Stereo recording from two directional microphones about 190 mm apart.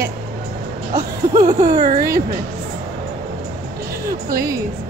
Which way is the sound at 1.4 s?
40° right (ahead or behind).